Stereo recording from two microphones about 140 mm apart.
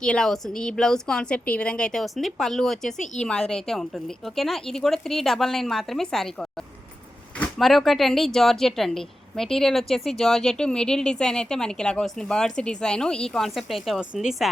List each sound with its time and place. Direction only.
0.0 s speech: 5° left (ahead or behind)